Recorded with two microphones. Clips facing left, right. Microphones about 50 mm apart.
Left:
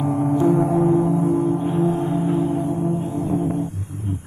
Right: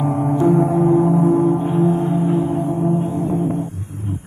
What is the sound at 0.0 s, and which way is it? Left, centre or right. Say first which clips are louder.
Music: right 2 dB; centre.